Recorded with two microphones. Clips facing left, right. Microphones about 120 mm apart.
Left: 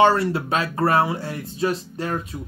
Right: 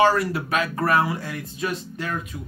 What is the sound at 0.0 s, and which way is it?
Speech, 25° left (ahead or behind).